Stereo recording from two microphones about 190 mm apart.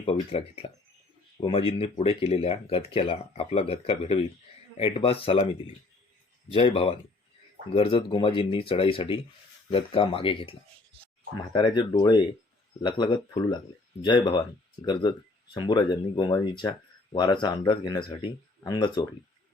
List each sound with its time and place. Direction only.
0.0 s speech: 30° left (ahead or behind)
6.5 s speech: 30° left (ahead or behind)